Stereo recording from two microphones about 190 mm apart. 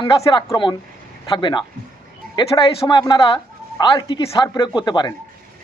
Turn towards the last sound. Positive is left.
turn(degrees=20)  # may be behind; listen again after turning